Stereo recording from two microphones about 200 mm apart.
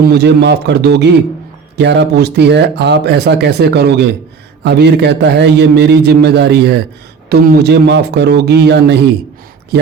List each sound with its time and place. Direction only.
0.0 s speech: 55° right (ahead or behind)